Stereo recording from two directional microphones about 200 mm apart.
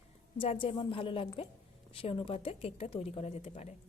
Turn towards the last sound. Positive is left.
turn(degrees=30)  # may be behind; listen again after turning